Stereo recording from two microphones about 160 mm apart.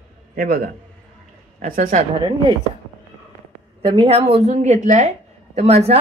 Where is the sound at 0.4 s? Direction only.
65° right (ahead or behind).